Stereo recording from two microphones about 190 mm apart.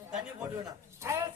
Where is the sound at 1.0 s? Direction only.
15° right (ahead or behind).